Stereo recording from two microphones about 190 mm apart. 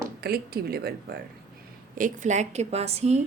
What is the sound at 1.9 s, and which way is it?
Speech, 40° right (ahead or behind).